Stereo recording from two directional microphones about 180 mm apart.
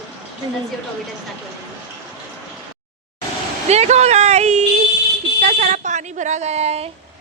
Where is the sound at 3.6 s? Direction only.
40° right (ahead or behind).